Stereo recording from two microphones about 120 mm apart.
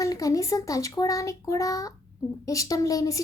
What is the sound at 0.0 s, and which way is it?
Speech, 30° left (ahead or behind).